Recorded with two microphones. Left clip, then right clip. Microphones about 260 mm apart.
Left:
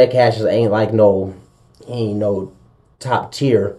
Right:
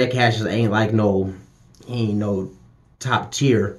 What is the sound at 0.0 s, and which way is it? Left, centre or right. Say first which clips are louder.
Speech: left 7 dB; right.